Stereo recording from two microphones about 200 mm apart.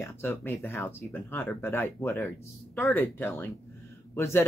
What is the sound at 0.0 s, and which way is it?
Speech, 10° left (ahead or behind).